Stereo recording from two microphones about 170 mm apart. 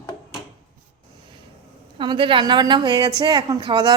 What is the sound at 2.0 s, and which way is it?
A woman's voice, 30° right (ahead or behind).